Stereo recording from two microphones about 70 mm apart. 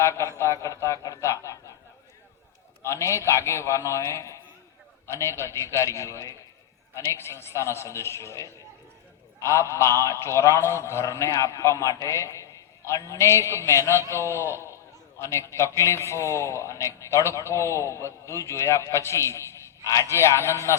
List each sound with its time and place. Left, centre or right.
0.0 s a man's voice: left
2.8 s a man's voice: left